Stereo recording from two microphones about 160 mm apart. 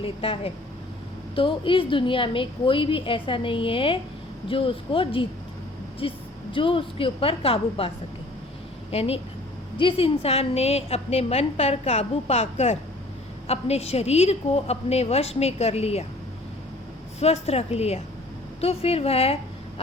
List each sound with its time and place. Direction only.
0.0 s a woman's voice: 35° left (ahead or behind)
17.2 s a woman's voice: 40° left (ahead or behind)